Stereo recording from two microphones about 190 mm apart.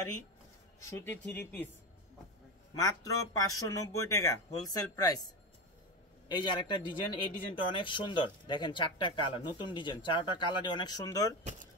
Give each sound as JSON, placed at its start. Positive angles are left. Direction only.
{"t": 0.8, "sound": "speech", "side_deg": 10}
{"t": 2.7, "sound": "speech", "side_deg": 20}